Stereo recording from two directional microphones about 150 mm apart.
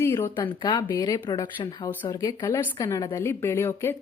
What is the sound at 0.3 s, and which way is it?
Speech, 30° left (ahead or behind).